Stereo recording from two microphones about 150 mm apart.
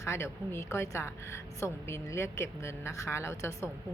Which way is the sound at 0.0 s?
15° left (ahead or behind).